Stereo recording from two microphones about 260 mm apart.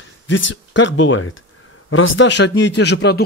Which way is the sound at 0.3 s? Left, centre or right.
Left.